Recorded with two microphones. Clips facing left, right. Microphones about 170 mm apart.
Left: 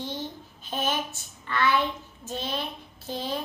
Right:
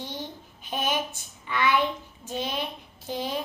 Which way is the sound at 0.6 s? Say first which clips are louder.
Right 1 dB; 15° right (ahead or behind).